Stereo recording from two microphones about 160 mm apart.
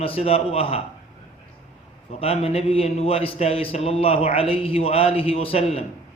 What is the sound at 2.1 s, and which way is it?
A man's voice, 40° left (ahead or behind).